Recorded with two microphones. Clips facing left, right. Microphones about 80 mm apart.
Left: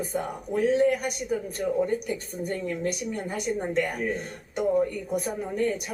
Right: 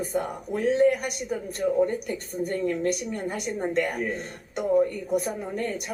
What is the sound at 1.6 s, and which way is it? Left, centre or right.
Speech, centre.